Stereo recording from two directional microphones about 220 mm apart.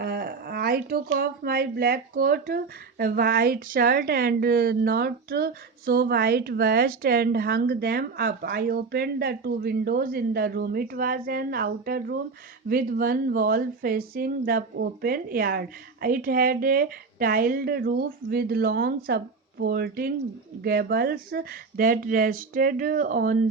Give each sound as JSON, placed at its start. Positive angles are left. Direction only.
{"t": 0.0, "sound": "a woman's voice", "side_deg": -45}